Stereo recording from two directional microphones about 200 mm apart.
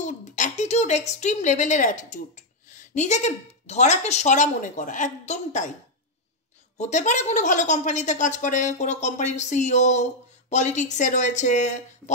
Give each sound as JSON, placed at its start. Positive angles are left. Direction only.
{"t": 0.0, "sound": "speech", "side_deg": 35}
{"t": 6.8, "sound": "speech", "side_deg": 35}